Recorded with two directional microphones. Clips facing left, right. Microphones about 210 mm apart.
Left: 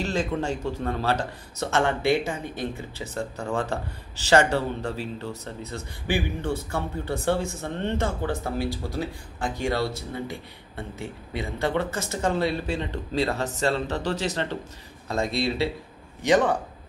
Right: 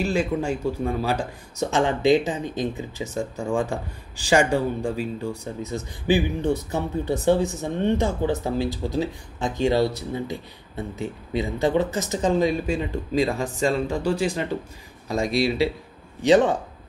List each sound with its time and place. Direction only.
0.0 s speech: 10° right (ahead or behind)